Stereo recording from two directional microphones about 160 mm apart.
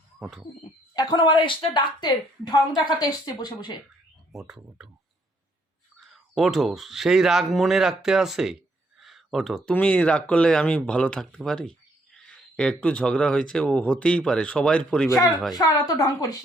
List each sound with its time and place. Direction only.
0.2 s owl: centre (ahead or behind)
0.9 s a woman's voice: 25° left (ahead or behind)
4.3 s speech: 5° right (ahead or behind)
6.0 s speech: centre (ahead or behind)
9.0 s a sound: centre (ahead or behind)
9.6 s speech: 10° left (ahead or behind)
15.5 s a woman's voice: 25° left (ahead or behind)